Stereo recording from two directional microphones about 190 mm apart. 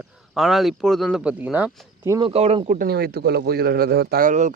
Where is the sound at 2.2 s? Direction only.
30° right (ahead or behind).